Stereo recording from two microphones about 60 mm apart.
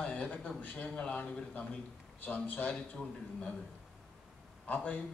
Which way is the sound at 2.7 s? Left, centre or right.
Centre.